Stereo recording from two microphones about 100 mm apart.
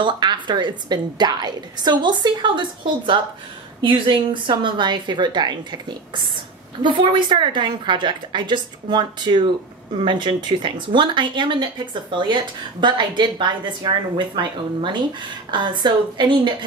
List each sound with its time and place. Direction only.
0.0 s a woman's voice: 50° right (ahead or behind)